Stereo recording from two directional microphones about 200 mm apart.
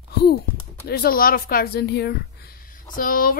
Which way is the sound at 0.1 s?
50° left (ahead or behind).